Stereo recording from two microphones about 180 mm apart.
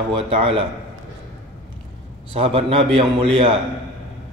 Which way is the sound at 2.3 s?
30° right (ahead or behind).